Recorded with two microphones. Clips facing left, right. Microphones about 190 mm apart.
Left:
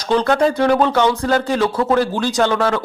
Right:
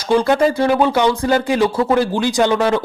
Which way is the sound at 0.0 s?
10° right (ahead or behind).